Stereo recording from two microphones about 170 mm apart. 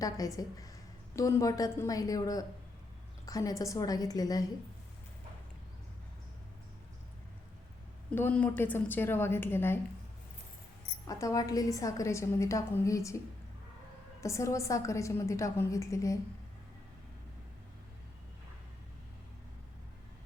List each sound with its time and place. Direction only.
0.0 s a woman's voice: 20° left (ahead or behind)
8.1 s a woman's voice: 10° left (ahead or behind)
11.0 s a woman's voice: 20° left (ahead or behind)
14.2 s a woman's voice: 20° left (ahead or behind)